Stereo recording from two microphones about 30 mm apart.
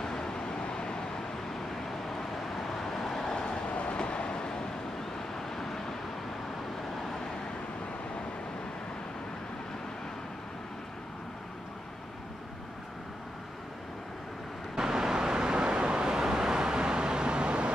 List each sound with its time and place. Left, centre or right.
0.0 s vehicle: left
2.5 s vehicle: centre
3.7 s vehicle: left
4.0 s vehicle: left
5.3 s vehicle: centre
14.8 s vehicle: centre